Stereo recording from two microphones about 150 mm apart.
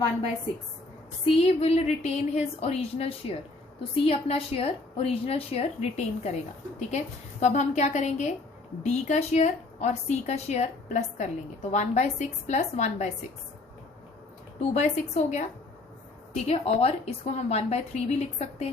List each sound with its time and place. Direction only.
1.2 s a woman's voice: 45° left (ahead or behind)
14.7 s a woman's voice: 50° left (ahead or behind)